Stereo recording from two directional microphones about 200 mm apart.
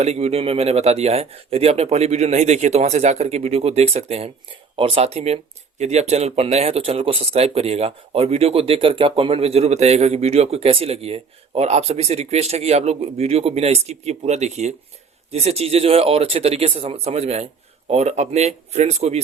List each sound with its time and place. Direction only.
0.0 s speech: 30° right (ahead or behind)